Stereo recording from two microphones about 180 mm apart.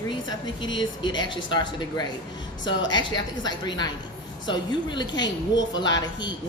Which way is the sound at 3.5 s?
25° left (ahead or behind).